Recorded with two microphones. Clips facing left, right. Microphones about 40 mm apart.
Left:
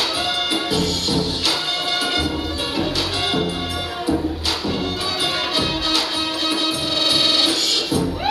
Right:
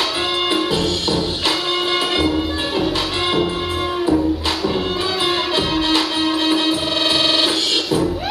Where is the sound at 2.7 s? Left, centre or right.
Right.